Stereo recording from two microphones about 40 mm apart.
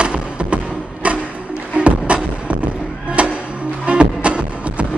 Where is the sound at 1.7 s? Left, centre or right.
Right.